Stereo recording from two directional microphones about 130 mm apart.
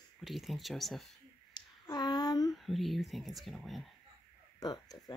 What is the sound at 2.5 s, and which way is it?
Speech, centre (ahead or behind).